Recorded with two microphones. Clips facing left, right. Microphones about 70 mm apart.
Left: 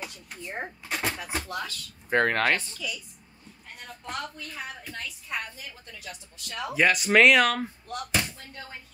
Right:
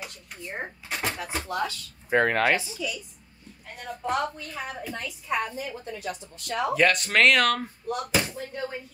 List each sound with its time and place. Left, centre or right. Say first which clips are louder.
0.0 s a sound: even; centre
1.5 s speech: right 5 dB; centre
5.4 s a woman's voice: right 9 dB; right
6.7 s speech: left 2 dB; centre
7.9 s speech: right 5 dB; centre